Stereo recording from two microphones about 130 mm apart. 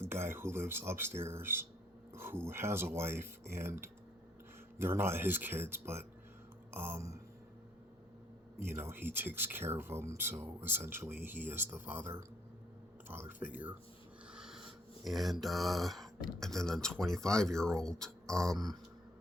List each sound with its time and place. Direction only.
0.0 s speech: 20° right (ahead or behind)
8.6 s speech: 20° right (ahead or behind)
14.3 s a sound: 5° right (ahead or behind)
15.0 s speech: centre (ahead or behind)